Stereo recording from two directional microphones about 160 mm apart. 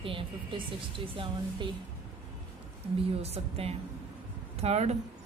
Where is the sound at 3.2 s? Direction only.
40° right (ahead or behind).